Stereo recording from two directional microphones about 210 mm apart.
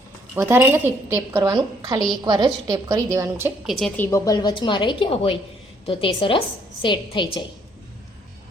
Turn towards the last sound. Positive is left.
turn(degrees=25)  # may be behind; listen again after turning